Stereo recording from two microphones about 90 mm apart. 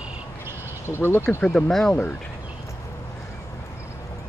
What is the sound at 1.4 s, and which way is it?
Speech, 10° left (ahead or behind).